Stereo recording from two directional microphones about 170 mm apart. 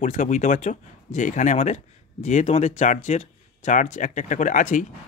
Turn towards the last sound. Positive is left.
turn(degrees=50)  # may be behind; listen again after turning